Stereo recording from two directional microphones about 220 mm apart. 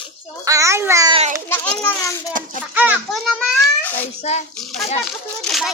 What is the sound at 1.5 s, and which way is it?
Children playing, 10° left (ahead or behind).